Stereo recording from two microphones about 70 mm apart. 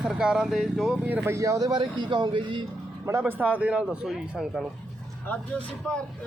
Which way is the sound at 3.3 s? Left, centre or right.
Right.